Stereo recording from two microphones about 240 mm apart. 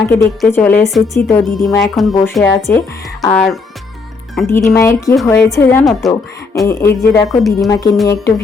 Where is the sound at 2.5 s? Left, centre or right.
Centre.